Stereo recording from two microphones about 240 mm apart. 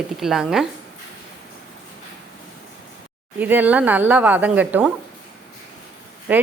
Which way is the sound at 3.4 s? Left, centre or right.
Centre.